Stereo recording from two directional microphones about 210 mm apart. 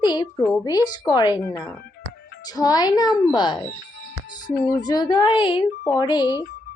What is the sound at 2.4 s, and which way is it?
A woman's voice, 20° left (ahead or behind).